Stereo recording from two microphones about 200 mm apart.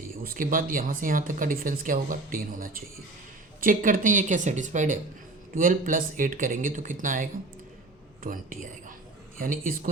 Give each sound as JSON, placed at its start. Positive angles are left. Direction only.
{"t": 0.2, "sound": "speech", "side_deg": -45}